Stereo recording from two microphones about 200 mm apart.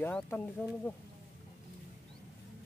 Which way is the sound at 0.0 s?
10° left (ahead or behind).